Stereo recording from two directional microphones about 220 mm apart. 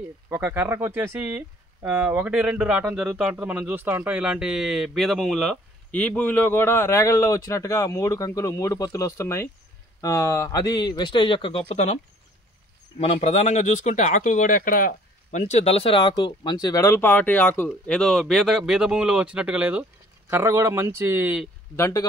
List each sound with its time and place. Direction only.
0.3 s a man's voice: 10° right (ahead or behind); by 12.0 s 30° left (ahead or behind)
13.0 s a man's voice: 30° left (ahead or behind); by 21.5 s 10° right (ahead or behind)
21.7 s speech: 15° left (ahead or behind)